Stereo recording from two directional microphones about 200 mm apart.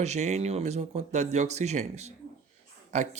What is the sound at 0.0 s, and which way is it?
Speech, 35° right (ahead or behind).